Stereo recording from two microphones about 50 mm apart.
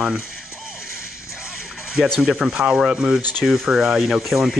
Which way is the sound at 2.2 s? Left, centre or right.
Centre.